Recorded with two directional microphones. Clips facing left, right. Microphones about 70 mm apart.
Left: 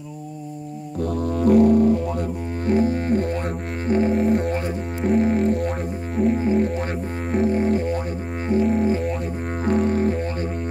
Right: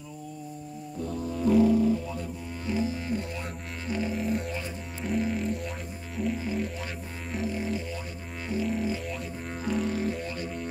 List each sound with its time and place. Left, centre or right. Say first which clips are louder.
1.0 s music: left 8 dB; left
4.2 s music: left 10 dB; left
6.3 s music: left 11 dB; left